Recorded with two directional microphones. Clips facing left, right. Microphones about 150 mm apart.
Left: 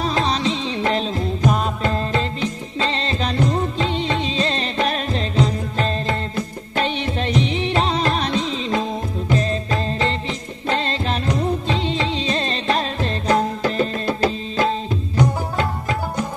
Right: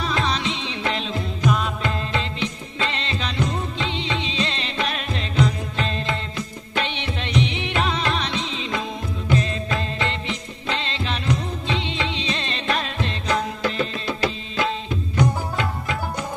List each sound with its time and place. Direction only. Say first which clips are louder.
0.0 s music: left 4 dB; 35° left (ahead or behind)